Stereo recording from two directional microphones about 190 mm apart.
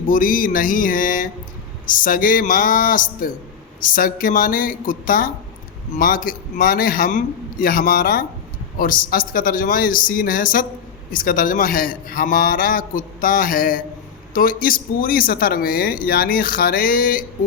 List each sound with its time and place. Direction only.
0.1 s a man's voice: 45° left (ahead or behind)